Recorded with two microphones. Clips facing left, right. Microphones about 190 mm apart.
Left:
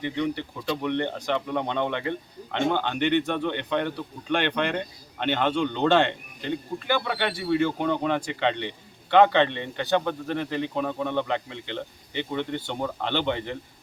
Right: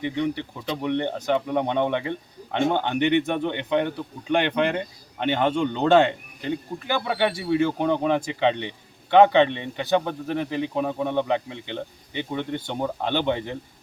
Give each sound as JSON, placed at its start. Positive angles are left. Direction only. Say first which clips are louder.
{"t": 0.7, "sound": "speech", "louder": "right 1 dB", "side_deg": -15}